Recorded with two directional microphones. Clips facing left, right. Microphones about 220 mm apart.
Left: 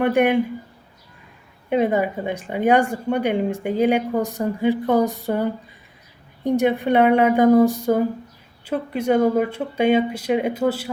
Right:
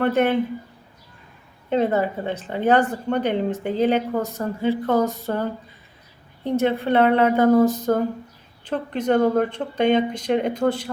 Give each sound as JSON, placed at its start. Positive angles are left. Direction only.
{"t": 0.0, "sound": "speech", "side_deg": 15}
{"t": 1.7, "sound": "speech", "side_deg": 15}